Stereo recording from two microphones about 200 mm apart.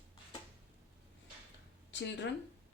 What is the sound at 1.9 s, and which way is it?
Speech, 65° left (ahead or behind).